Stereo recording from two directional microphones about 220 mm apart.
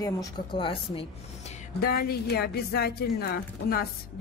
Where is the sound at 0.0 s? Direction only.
20° left (ahead or behind).